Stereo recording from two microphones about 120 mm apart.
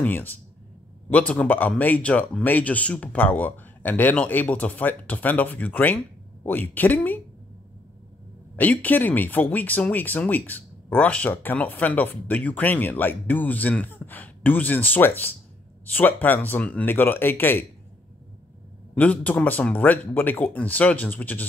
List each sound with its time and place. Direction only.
0.0 s speech: 15° left (ahead or behind)
8.5 s speech: 15° left (ahead or behind)
18.9 s speech: 10° left (ahead or behind)